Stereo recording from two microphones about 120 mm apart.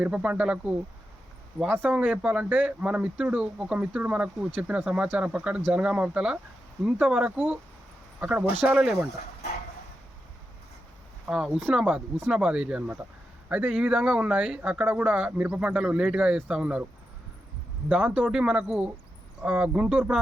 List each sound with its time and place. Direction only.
0.0 s speech: 10° right (ahead or behind)
11.3 s speech: 5° right (ahead or behind)
17.8 s speech: 10° right (ahead or behind)